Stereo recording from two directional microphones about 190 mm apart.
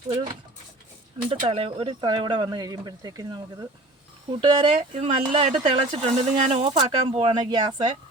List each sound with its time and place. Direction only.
0.1 s speech: 20° right (ahead or behind)